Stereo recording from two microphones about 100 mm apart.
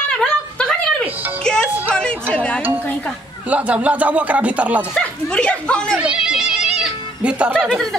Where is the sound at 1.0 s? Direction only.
20° right (ahead or behind).